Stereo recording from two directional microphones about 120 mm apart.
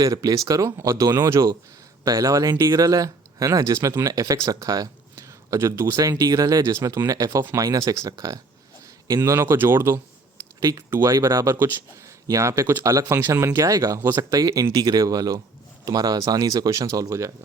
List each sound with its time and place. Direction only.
0.0 s speech: 30° right (ahead or behind)
11.1 s speech: 35° right (ahead or behind)